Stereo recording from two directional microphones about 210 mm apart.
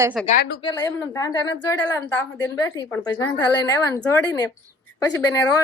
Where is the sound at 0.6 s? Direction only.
20° left (ahead or behind).